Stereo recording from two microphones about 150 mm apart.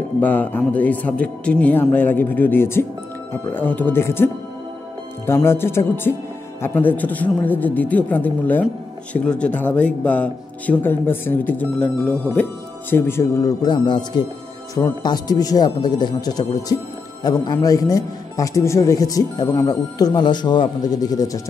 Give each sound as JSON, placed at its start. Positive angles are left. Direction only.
{"t": 0.2, "sound": "a man's voice", "side_deg": 10}